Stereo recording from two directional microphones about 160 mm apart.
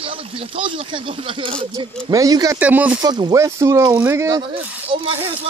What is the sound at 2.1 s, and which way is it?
Speech, 25° right (ahead or behind).